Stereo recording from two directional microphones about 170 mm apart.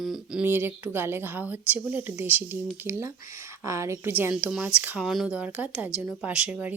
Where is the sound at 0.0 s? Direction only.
Centre (ahead or behind).